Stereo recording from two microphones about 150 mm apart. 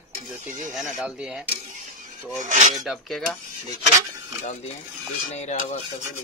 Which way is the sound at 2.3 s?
55° right (ahead or behind).